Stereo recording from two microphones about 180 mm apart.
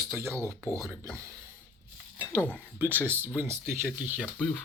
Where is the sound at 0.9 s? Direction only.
10° left (ahead or behind).